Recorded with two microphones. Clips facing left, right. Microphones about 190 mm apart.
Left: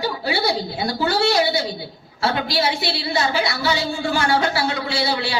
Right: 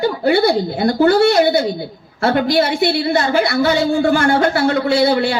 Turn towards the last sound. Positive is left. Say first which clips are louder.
# right 9 dB
turn(degrees=-55)  # may be behind; listen again after turning